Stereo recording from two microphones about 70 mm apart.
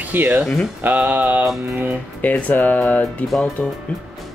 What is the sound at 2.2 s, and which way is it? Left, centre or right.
Speech, left.